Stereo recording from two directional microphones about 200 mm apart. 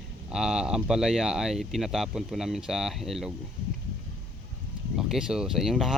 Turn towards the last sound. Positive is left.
turn(degrees=0)  # may be behind; listen again after turning